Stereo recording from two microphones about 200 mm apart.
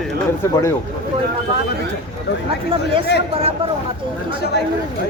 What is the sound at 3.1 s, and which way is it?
Speech, 55° left (ahead or behind).